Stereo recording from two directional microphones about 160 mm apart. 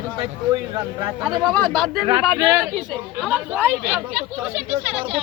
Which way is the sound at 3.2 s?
5° right (ahead or behind).